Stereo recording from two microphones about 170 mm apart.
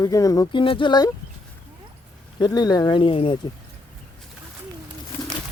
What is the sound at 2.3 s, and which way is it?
Speech, 25° left (ahead or behind).